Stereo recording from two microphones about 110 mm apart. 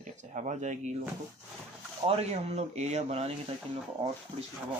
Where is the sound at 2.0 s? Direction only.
75° right (ahead or behind).